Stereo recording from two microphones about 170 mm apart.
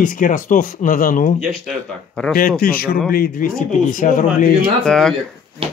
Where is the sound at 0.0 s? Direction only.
50° left (ahead or behind).